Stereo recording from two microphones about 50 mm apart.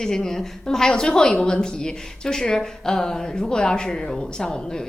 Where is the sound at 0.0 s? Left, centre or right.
Centre.